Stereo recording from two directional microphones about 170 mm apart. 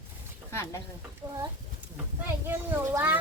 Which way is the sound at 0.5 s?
15° left (ahead or behind).